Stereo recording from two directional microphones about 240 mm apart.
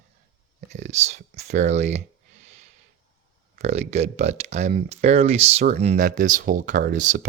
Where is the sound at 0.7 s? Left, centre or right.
Right.